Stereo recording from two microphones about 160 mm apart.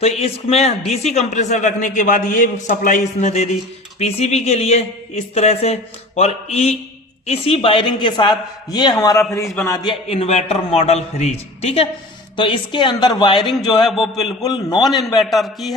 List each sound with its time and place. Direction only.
0.0 s a man's voice: 40° left (ahead or behind); by 9.9 s 25° left (ahead or behind)
10.1 s a man's voice: 40° left (ahead or behind)
13.8 s a man's voice: centre (ahead or behind)
14.4 s a man's voice: 25° left (ahead or behind)
14.8 s a man's voice: centre (ahead or behind)